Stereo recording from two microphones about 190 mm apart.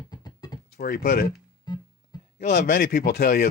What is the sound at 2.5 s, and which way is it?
Speech, 50° left (ahead or behind).